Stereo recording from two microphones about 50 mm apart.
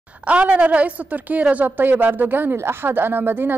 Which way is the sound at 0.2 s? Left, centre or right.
Right.